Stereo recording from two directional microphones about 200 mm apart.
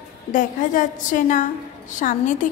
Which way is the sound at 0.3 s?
40° left (ahead or behind).